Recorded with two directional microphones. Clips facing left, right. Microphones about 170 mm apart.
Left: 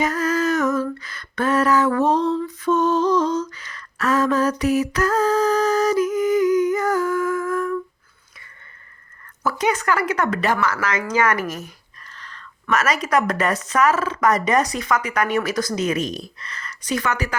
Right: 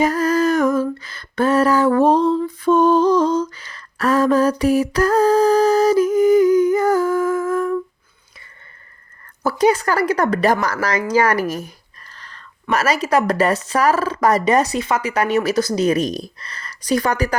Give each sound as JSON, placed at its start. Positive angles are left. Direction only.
{"t": 0.0, "sound": "humming", "side_deg": -30}
{"t": 2.3, "sound": "lullaby", "side_deg": -30}
{"t": 9.4, "sound": "speech", "side_deg": -30}
{"t": 12.0, "sound": "a sound", "side_deg": -35}
{"t": 12.7, "sound": "speech", "side_deg": -30}